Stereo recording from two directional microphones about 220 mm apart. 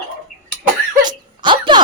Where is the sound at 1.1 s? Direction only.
20° right (ahead or behind).